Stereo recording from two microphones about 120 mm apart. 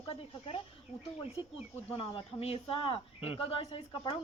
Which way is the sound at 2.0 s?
55° left (ahead or behind).